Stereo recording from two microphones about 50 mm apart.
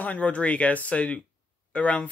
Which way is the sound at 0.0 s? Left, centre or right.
Left.